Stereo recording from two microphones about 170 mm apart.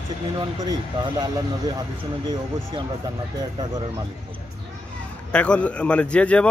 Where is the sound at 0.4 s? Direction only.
25° right (ahead or behind).